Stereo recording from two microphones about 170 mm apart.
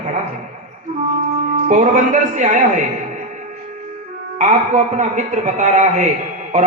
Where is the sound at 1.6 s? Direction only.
45° right (ahead or behind).